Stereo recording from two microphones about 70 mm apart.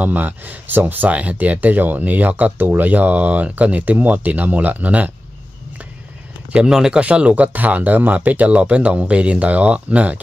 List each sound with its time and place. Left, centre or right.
0.0 s speech: right
6.5 s speech: centre